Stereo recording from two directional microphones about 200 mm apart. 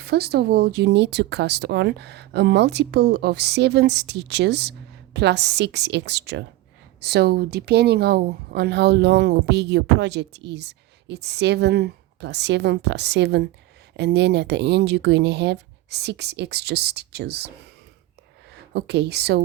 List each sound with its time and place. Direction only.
0.0 s speech: 50° right (ahead or behind)
18.7 s speech: 55° right (ahead or behind)